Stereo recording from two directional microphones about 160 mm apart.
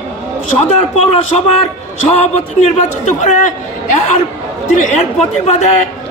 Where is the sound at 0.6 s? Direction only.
45° left (ahead or behind).